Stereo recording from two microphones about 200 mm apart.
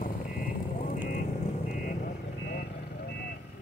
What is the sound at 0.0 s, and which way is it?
Vehicle, 45° left (ahead or behind).